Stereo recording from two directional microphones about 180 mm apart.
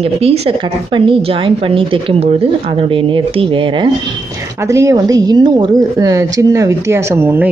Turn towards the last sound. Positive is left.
turn(degrees=-15)  # may be behind; listen again after turning